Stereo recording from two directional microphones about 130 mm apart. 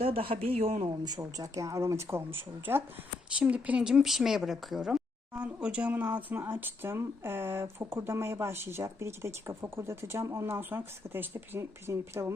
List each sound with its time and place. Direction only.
0.0 s speech: 45° right (ahead or behind)
1.0 s speech: 30° right (ahead or behind)